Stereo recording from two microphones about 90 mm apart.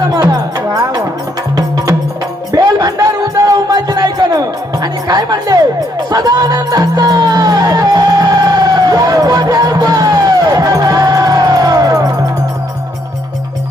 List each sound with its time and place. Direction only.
0.0 s music: 40° right (ahead or behind)
2.5 s music: 45° right (ahead or behind)